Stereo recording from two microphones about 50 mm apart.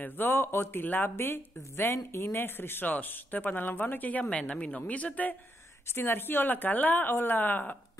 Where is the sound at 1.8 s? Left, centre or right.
Left.